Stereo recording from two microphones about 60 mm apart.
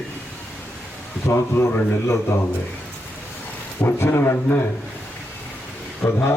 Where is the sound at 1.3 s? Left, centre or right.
Left.